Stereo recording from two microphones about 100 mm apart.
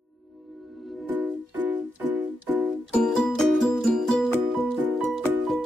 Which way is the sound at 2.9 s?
5° left (ahead or behind).